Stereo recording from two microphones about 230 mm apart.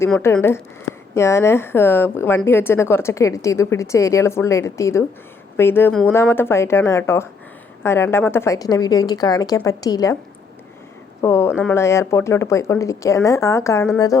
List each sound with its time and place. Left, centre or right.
0.0 s a woman's voice: centre
11.2 s a woman's voice: centre